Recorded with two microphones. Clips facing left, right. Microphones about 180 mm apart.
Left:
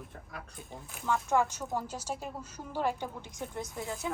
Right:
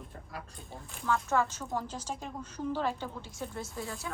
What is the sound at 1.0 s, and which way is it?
A woman's voice, 15° left (ahead or behind).